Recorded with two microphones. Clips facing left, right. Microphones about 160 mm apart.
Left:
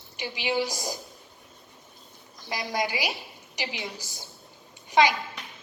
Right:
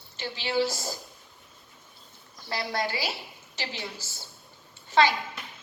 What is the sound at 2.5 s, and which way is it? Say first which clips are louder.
A woman's voice: left 1 dB; 15° left (ahead or behind).